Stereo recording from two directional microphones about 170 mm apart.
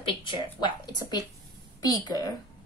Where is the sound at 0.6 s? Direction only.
25° left (ahead or behind).